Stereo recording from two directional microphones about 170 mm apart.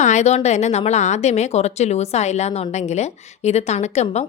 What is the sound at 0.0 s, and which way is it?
A woman's voice, 45° left (ahead or behind).